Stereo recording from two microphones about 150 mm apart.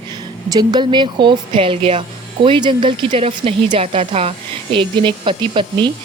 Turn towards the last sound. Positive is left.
turn(degrees=-30)  # may be behind; listen again after turning